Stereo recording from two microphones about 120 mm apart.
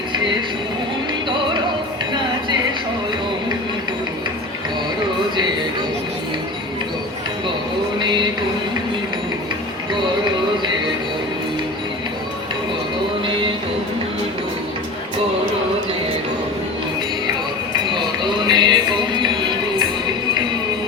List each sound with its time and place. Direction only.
1.3 s music: 40° right (ahead or behind)
7.9 s music: 40° right (ahead or behind)
17.9 s music: 40° right (ahead or behind)